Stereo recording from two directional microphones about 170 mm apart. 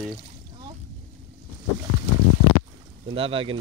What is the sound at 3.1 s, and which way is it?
Speech, 35° right (ahead or behind).